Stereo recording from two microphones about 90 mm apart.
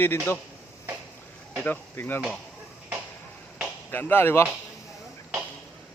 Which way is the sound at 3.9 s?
25° left (ahead or behind).